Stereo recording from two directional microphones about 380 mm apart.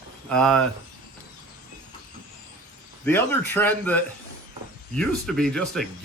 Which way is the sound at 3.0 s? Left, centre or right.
Centre.